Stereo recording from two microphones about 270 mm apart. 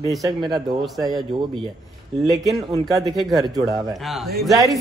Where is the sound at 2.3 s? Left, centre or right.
Centre.